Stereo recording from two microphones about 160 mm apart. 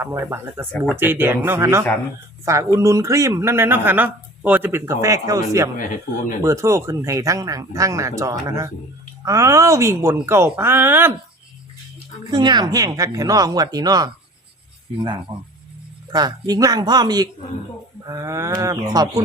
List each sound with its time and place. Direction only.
0.0 s speech: 20° right (ahead or behind)
12.3 s speech: 30° right (ahead or behind)
16.1 s speech: 25° right (ahead or behind)